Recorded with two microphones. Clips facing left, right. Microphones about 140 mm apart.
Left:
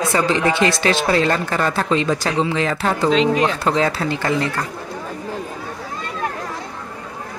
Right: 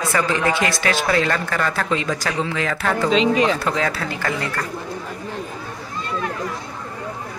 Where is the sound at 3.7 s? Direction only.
25° left (ahead or behind).